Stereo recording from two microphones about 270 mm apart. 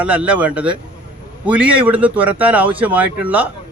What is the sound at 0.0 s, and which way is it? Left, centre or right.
A man's voice, centre.